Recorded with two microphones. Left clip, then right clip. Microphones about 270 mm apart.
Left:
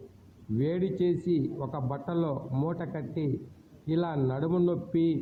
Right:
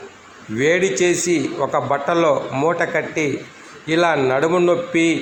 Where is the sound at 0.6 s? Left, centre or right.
Left.